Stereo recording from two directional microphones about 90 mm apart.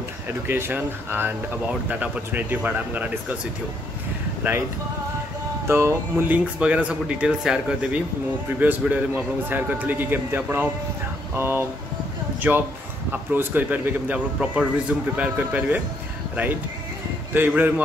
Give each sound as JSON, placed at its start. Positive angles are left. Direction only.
{"t": 0.3, "sound": "a man's voice", "side_deg": -20}
{"t": 4.4, "sound": "speech", "side_deg": -25}
{"t": 5.7, "sound": "a man's voice", "side_deg": -30}
{"t": 6.6, "sound": "a man's voice", "side_deg": -10}
{"t": 17.3, "sound": "speech", "side_deg": -20}